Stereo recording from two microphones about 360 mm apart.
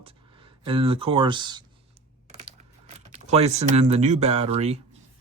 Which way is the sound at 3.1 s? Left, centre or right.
Centre.